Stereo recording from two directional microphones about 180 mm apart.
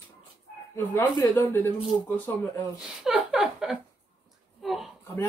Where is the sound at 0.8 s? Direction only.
10° left (ahead or behind).